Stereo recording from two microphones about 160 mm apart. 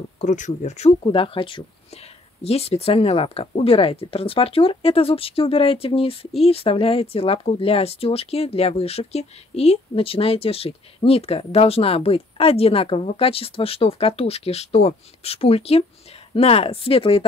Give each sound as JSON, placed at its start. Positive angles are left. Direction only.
{"t": 0.2, "sound": "speech", "side_deg": 50}
{"t": 1.0, "sound": "speech", "side_deg": 30}